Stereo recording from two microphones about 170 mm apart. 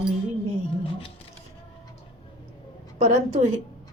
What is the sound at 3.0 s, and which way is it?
Speech, 45° right (ahead or behind).